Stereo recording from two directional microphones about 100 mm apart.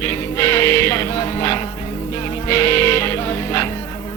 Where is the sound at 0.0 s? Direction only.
30° left (ahead or behind).